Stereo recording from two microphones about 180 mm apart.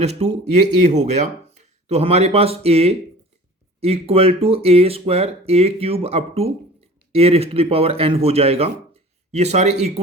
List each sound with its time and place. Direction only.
0.0 s speech: 35° right (ahead or behind)